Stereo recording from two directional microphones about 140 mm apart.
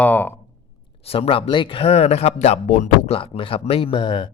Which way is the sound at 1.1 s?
45° left (ahead or behind).